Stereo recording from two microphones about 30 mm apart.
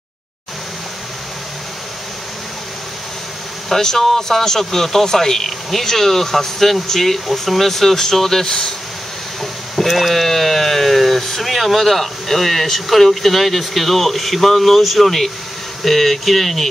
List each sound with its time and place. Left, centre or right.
3.6 s speech: centre
8.5 s speech: left
9.4 s speech: centre